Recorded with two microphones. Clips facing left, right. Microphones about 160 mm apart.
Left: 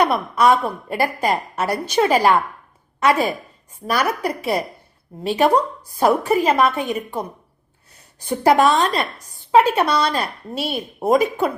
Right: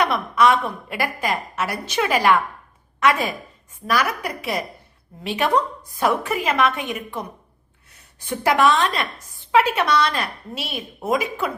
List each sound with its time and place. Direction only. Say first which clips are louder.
0.0 s a woman's voice: left 2 dB; 35° left (ahead or behind)
8.3 s a woman's voice: left 3 dB; 40° left (ahead or behind)